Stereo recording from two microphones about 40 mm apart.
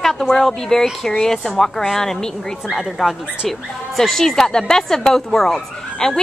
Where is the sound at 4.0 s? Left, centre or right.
Centre.